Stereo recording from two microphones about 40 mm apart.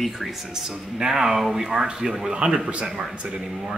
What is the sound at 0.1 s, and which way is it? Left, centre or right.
A man's voice, centre.